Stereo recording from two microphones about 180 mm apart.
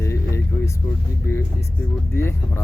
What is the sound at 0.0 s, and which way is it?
Vehicle, 15° left (ahead or behind).